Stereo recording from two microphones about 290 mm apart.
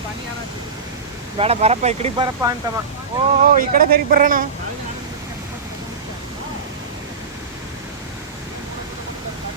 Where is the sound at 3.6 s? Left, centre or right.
Right.